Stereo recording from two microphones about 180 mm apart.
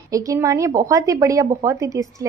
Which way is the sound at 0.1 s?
20° right (ahead or behind).